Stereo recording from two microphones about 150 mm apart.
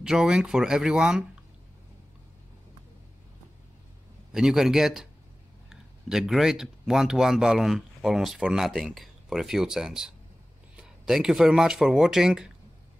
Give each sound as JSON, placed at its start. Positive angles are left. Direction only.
{"t": 0.0, "sound": "speech", "side_deg": -5}
{"t": 4.3, "sound": "speech", "side_deg": -5}